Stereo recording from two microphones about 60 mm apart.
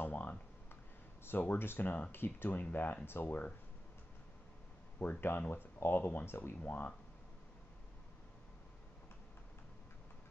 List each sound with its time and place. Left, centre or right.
0.0 s computer keyboard: left
1.4 s speech: left
5.0 s speech: left
5.5 s speech: left
6.6 s speech: left